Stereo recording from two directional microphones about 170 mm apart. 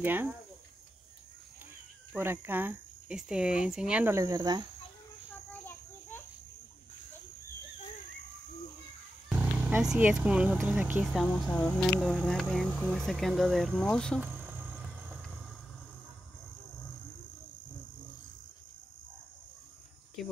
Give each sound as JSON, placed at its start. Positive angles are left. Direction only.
{"t": 0.0, "sound": "speech", "side_deg": -10}
{"t": 2.1, "sound": "speech", "side_deg": -10}
{"t": 5.5, "sound": "a sound", "side_deg": 10}
{"t": 9.3, "sound": "speech", "side_deg": -10}
{"t": 14.2, "sound": "a sound", "side_deg": -10}
{"t": 20.2, "sound": "cricket", "side_deg": 0}